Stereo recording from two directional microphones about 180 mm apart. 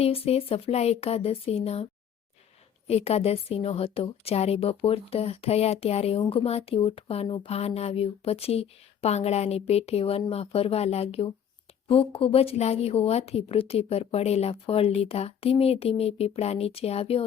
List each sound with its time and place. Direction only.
0.0 s a woman's voice: 35° left (ahead or behind)